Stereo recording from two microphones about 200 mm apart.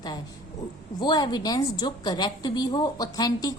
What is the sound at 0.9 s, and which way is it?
A woman's voice, 20° left (ahead or behind).